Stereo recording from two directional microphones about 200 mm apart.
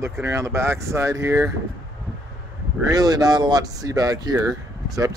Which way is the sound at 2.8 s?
20° right (ahead or behind).